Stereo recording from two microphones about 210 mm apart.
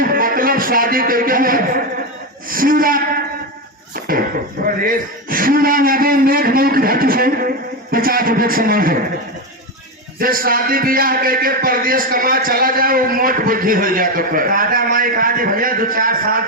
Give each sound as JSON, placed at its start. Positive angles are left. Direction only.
{"t": 0.0, "sound": "a sound", "side_deg": -45}
{"t": 2.5, "sound": "gasp", "side_deg": -40}
{"t": 4.6, "sound": "a man's voice", "side_deg": -45}
{"t": 10.2, "sound": "a man's voice", "side_deg": -45}